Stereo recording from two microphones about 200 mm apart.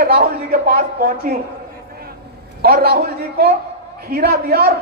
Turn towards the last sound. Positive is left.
turn(degrees=-50)  # may be behind; listen again after turning